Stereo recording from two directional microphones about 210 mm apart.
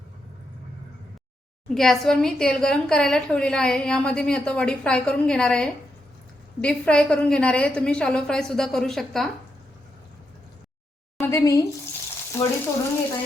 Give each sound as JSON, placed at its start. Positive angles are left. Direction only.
{"t": 1.7, "sound": "a woman's voice", "side_deg": 0}
{"t": 11.2, "sound": "a woman's voice", "side_deg": 15}
{"t": 12.4, "sound": "sizzle", "side_deg": 10}